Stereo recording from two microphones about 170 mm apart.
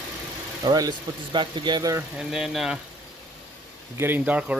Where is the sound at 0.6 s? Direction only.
20° right (ahead or behind).